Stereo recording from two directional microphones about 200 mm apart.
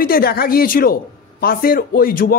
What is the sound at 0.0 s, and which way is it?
A man's voice, 50° left (ahead or behind).